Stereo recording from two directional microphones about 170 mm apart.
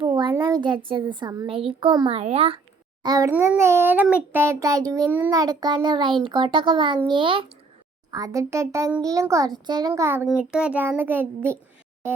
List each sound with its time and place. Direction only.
0.0 s a child's voice: 25° right (ahead or behind)
3.0 s a child's voice: 20° right (ahead or behind)
8.1 s a child's voice: 20° right (ahead or behind)